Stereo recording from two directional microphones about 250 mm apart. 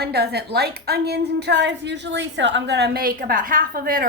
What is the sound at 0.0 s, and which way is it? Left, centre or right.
A woman's voice, right.